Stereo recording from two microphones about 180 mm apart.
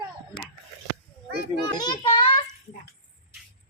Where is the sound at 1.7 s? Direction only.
25° left (ahead or behind).